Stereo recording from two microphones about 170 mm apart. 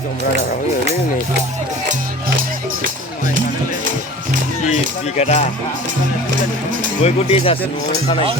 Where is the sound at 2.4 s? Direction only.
55° right (ahead or behind).